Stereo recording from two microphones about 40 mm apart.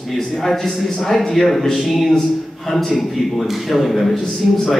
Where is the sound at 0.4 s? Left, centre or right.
Centre.